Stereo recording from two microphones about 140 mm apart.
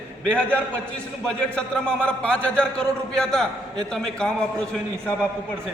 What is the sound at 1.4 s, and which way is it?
A man's voice, 5° left (ahead or behind).